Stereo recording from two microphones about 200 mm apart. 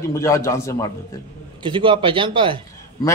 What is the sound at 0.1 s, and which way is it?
Speech, 15° left (ahead or behind).